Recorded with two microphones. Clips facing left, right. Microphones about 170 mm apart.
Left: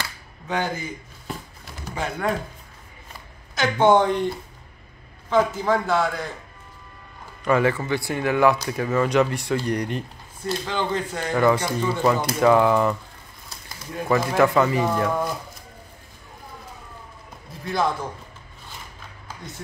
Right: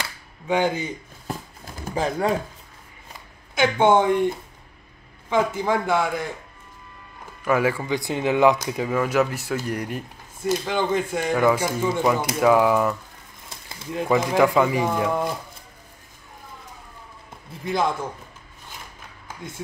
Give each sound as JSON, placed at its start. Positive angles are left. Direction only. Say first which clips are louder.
{"t": 0.5, "sound": "speech", "louder": "right 5 dB", "side_deg": -15}
{"t": 2.0, "sound": "speech", "louder": "right 5 dB", "side_deg": -35}
{"t": 3.6, "sound": "speech", "louder": "even", "side_deg": -10}
{"t": 5.3, "sound": "speech", "louder": "left 1 dB", "side_deg": -10}
{"t": 7.4, "sound": "speech", "louder": "left 1 dB", "side_deg": -5}
{"t": 13.5, "sound": "speech", "louder": "right 4 dB", "side_deg": -20}
{"t": 17.6, "sound": "a man's voice", "louder": "even", "side_deg": -20}